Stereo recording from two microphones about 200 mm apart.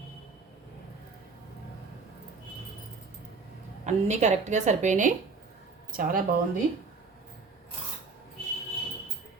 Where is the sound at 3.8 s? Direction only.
35° right (ahead or behind).